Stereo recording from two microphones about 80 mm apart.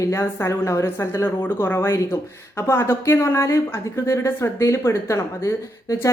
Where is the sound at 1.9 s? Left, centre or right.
Left.